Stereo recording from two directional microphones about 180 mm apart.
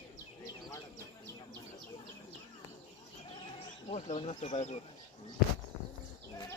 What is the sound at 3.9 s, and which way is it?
Speech, 40° left (ahead or behind).